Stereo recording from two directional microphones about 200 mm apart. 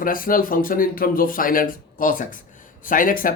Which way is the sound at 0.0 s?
45° left (ahead or behind).